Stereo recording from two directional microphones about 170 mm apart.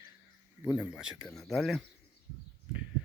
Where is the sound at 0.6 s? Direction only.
5° right (ahead or behind).